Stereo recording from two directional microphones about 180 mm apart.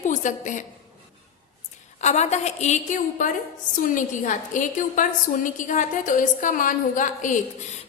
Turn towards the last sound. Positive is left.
turn(degrees=45)  # may be behind; listen again after turning